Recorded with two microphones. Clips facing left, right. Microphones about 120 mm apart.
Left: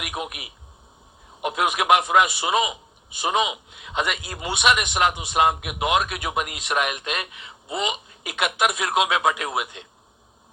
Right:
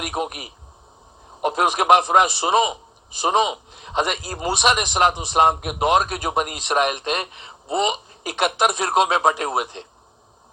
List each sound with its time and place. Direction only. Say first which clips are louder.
0.0 s a man's voice: right 5 dB; 35° right (ahead or behind)